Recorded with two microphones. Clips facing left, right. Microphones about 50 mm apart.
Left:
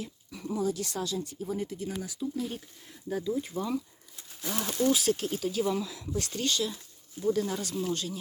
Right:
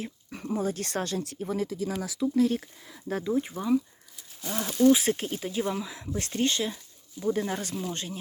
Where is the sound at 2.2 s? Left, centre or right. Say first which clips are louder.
Right 10 dB; right.